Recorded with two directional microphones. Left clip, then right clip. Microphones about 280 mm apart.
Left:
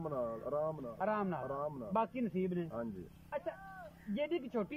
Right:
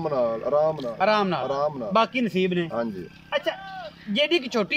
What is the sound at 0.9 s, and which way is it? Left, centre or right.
Speech, centre.